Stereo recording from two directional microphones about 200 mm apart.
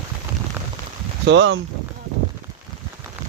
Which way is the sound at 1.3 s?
65° right (ahead or behind).